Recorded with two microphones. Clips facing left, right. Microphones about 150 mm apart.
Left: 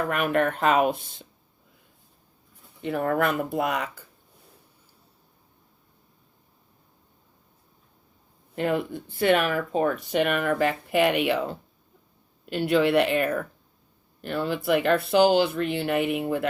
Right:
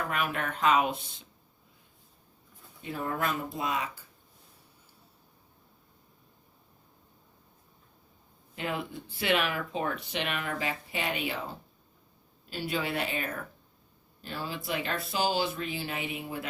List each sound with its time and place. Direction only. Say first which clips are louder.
0.1 s speech: left 8 dB; 55° left (ahead or behind)
2.8 s speech: left 8 dB; 65° left (ahead or behind)
8.5 s speech: left 9 dB; 50° left (ahead or behind)